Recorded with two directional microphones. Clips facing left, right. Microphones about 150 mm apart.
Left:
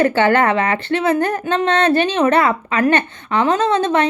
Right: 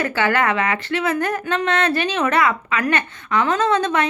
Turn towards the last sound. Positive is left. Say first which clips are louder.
# left 3 dB
turn(degrees=30)  # may be behind; listen again after turning